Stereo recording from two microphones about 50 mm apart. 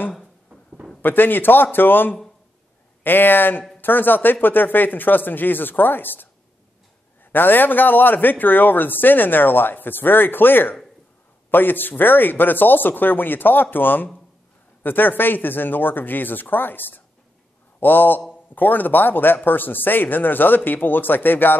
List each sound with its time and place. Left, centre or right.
1.0 s a man's voice: left
7.3 s a man's voice: left